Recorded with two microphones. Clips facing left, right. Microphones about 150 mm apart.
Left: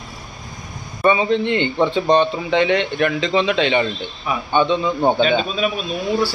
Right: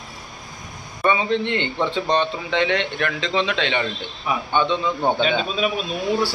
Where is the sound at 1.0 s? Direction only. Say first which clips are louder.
Left 4 dB; 5° left (ahead or behind).